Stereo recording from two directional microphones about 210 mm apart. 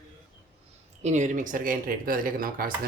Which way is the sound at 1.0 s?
35° right (ahead or behind).